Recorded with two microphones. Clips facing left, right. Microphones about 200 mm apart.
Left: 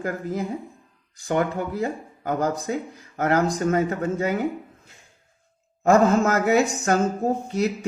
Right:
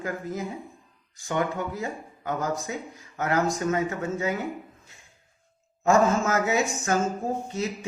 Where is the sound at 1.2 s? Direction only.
35° left (ahead or behind).